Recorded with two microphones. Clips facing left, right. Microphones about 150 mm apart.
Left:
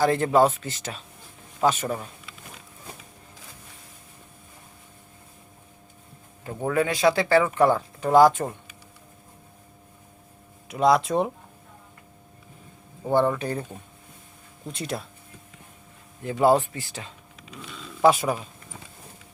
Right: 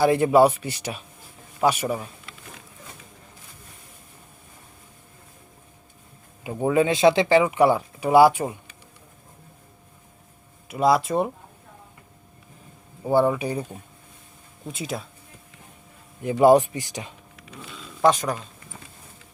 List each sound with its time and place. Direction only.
0.0 s speech: 10° right (ahead or behind)
6.4 s speech: 15° right (ahead or behind)
10.7 s speech: 5° right (ahead or behind)
13.1 s speech: 10° right (ahead or behind)
14.7 s speech: centre (ahead or behind)
16.2 s speech: 15° right (ahead or behind)
18.0 s speech: 10° left (ahead or behind)